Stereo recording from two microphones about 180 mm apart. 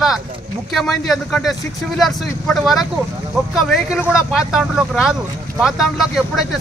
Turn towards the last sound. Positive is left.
turn(degrees=0)  # may be behind; listen again after turning